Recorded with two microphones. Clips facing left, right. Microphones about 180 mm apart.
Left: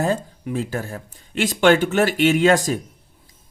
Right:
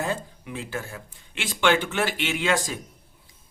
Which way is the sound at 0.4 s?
40° left (ahead or behind).